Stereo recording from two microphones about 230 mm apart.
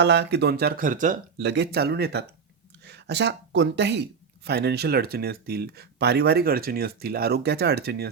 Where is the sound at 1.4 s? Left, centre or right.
Right.